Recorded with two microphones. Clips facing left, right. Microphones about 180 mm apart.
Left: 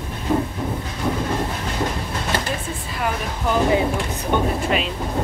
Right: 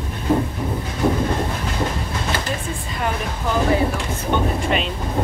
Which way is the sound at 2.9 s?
5° left (ahead or behind).